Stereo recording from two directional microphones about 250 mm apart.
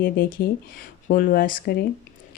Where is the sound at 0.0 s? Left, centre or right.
Left.